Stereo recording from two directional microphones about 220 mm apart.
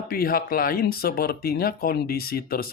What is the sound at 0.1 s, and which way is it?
Speech, 40° left (ahead or behind).